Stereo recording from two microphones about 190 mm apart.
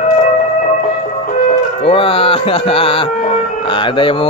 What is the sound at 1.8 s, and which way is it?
Speech, 30° left (ahead or behind).